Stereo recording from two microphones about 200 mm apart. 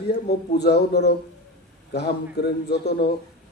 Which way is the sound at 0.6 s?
55° left (ahead or behind).